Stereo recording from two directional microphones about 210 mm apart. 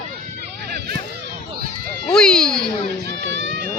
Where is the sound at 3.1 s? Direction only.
55° right (ahead or behind).